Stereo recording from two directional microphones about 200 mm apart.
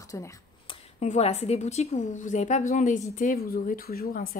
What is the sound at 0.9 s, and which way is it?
A woman's voice, 35° left (ahead or behind).